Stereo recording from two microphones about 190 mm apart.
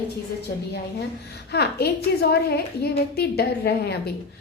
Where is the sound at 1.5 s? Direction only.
60° left (ahead or behind).